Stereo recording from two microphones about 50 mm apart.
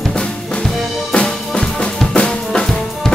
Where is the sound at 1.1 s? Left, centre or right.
Left.